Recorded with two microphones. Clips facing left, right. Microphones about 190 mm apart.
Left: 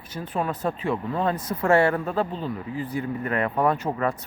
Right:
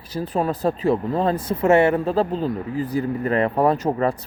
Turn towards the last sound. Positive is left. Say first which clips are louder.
# right 4 dB
turn(degrees=-35)  # may be behind; listen again after turning